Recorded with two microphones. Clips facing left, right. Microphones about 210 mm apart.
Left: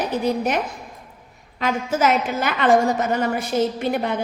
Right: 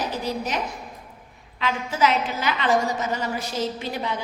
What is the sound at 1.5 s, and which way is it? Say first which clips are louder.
A woman's voice: left 3 dB; 45° left (ahead or behind).